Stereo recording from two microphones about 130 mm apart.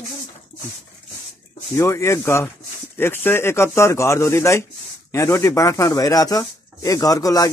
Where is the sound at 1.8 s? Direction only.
20° left (ahead or behind).